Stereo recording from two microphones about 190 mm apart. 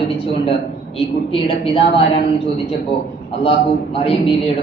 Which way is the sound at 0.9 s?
30° left (ahead or behind).